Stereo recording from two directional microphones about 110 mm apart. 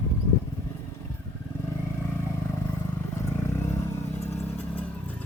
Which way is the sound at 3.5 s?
25° left (ahead or behind).